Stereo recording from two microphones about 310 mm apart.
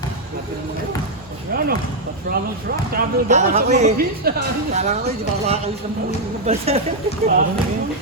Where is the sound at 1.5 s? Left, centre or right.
Right.